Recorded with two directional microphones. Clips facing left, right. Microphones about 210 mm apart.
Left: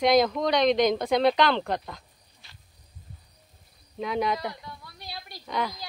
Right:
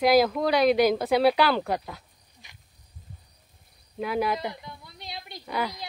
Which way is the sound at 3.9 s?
5° right (ahead or behind).